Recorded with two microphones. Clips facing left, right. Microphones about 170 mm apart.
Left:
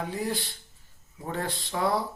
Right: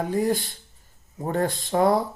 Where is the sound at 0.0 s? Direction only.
45° right (ahead or behind).